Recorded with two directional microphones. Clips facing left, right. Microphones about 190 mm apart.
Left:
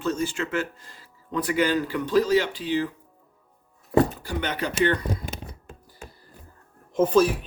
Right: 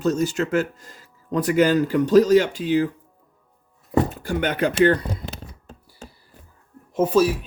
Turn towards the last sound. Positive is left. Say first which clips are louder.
# right 1 dB
turn(degrees=-10)  # may be behind; listen again after turning